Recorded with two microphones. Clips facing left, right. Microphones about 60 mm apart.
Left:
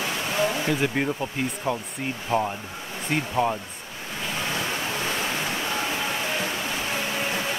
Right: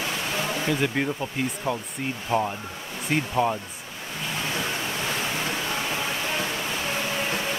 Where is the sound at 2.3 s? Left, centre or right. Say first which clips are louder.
Even; centre.